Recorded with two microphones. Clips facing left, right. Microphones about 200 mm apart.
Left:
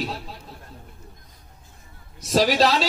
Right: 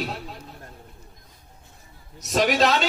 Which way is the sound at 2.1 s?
30° left (ahead or behind).